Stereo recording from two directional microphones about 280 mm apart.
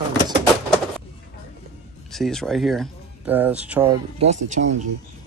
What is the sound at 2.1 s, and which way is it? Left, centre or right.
Speech, centre.